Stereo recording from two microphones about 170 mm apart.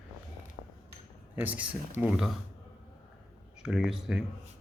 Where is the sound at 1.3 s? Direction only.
10° right (ahead or behind).